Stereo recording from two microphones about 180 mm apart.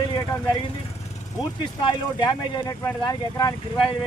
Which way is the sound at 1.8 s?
25° left (ahead or behind).